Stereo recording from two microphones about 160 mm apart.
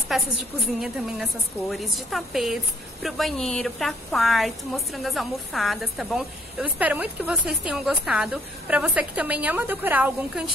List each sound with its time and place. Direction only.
0.1 s speech: centre (ahead or behind)